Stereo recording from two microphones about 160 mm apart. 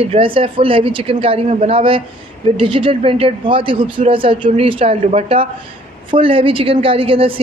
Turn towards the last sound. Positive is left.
turn(degrees=-35)  # may be behind; listen again after turning